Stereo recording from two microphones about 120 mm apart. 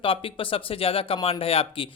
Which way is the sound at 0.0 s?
50° left (ahead or behind).